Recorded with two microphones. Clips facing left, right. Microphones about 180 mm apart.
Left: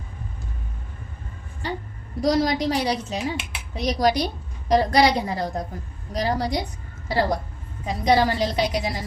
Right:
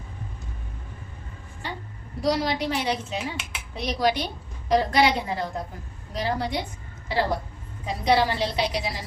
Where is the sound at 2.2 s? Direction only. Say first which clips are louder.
Left 4 dB; 45° left (ahead or behind).